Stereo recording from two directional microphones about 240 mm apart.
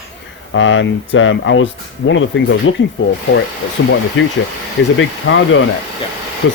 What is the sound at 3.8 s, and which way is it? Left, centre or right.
Speech, left.